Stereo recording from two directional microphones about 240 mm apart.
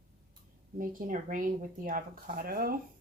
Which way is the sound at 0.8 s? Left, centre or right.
Right.